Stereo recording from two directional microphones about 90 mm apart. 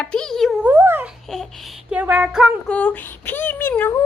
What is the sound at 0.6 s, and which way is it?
Speech, 25° right (ahead or behind).